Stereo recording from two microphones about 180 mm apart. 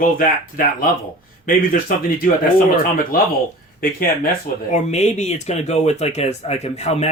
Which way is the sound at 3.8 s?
55° left (ahead or behind).